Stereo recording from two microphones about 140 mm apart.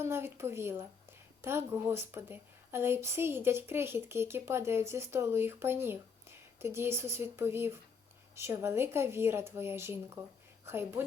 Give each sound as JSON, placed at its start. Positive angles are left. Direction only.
{"t": 0.0, "sound": "a woman's voice", "side_deg": -20}